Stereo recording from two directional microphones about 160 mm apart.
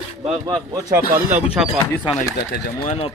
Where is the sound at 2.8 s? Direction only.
35° left (ahead or behind).